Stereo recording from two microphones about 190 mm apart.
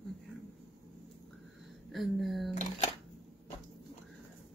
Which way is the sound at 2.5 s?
35° left (ahead or behind).